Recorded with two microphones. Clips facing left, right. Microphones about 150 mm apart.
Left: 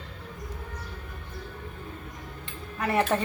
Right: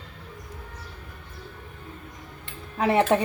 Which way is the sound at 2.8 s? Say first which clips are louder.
Right 5 dB; 25° right (ahead or behind).